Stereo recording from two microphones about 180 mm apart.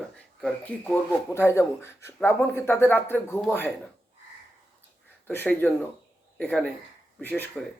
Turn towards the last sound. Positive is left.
turn(degrees=10)  # may be behind; listen again after turning